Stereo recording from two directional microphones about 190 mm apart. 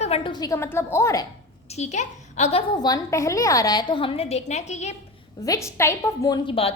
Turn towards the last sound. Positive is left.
turn(degrees=25)  # may be behind; listen again after turning